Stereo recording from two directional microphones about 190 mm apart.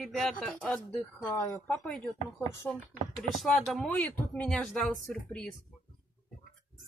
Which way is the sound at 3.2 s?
Centre (ahead or behind).